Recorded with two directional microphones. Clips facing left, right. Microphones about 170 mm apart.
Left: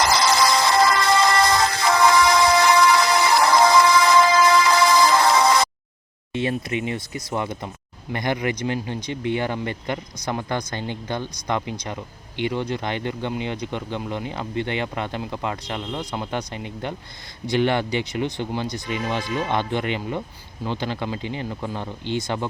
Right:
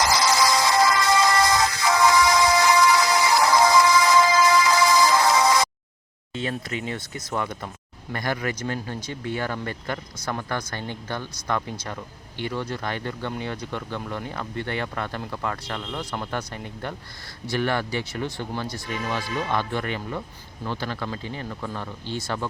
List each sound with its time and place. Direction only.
0.0 s music: 60° left (ahead or behind)
7.3 s speech: 15° left (ahead or behind)